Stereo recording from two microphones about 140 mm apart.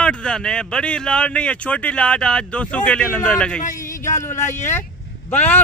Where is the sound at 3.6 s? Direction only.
70° left (ahead or behind).